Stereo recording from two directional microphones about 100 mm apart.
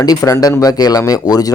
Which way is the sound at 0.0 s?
35° left (ahead or behind).